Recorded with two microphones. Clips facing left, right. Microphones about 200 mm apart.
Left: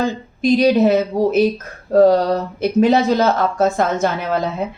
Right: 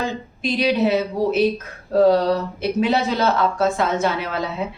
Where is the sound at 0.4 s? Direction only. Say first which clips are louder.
Left 6 dB; 45° left (ahead or behind).